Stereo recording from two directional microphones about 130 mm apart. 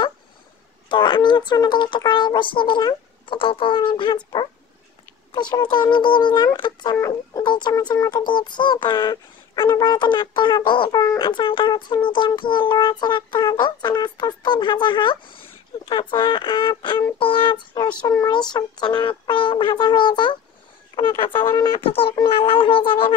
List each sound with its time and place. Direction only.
0.8 s speech: 40° left (ahead or behind)